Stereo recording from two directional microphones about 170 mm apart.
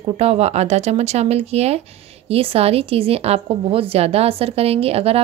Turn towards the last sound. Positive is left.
turn(degrees=-35)  # may be behind; listen again after turning